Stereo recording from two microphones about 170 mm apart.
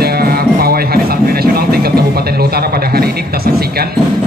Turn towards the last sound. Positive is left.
turn(degrees=-65)  # may be behind; listen again after turning